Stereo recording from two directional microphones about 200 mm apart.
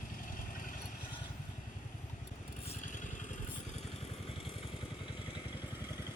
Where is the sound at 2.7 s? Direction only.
40° left (ahead or behind).